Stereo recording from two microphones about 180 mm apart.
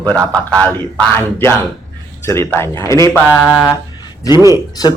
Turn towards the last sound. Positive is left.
turn(degrees=20)  # may be behind; listen again after turning